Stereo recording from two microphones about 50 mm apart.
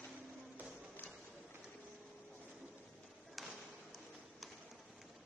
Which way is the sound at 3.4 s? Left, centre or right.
Centre.